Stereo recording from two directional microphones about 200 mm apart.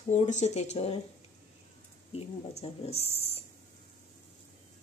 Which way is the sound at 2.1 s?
30° left (ahead or behind).